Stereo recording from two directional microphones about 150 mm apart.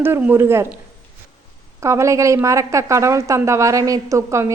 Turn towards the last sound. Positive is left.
turn(degrees=-20)  # may be behind; listen again after turning